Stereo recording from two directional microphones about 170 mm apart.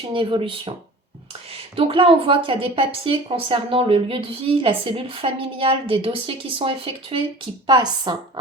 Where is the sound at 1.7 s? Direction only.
35° right (ahead or behind).